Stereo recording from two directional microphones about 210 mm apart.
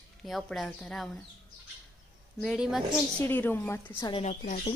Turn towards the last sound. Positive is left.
turn(degrees=35)  # may be behind; listen again after turning